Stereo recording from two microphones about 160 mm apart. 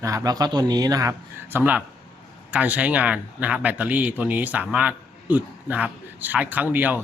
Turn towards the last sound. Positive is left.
turn(degrees=-10)  # may be behind; listen again after turning